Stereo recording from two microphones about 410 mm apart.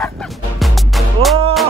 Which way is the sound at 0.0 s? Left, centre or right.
Centre.